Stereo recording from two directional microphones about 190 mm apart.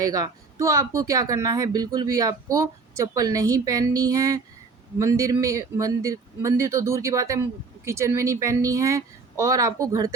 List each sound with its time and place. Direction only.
0.0 s speech: 20° right (ahead or behind)